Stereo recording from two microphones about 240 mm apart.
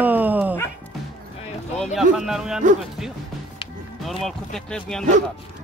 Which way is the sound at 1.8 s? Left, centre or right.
Centre.